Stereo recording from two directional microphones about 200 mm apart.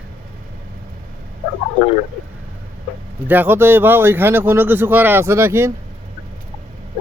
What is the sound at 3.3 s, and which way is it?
A man's voice, 10° right (ahead or behind).